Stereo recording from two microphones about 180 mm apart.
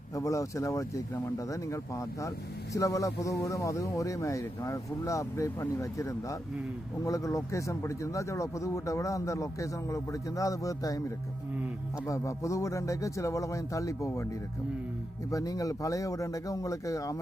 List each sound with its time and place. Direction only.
0.2 s speech: 15° left (ahead or behind)
12.0 s speech: 15° left (ahead or behind)
15.3 s speech: 20° left (ahead or behind)